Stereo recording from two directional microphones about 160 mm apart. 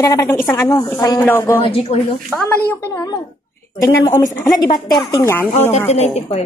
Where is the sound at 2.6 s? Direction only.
20° left (ahead or behind).